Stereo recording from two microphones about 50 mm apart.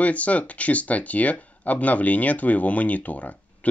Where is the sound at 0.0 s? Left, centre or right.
Left.